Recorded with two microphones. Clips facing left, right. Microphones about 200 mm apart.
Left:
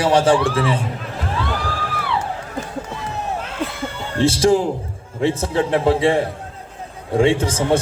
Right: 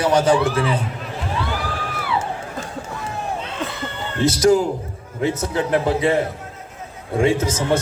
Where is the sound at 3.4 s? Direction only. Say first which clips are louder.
Left 2 dB; 10° left (ahead or behind).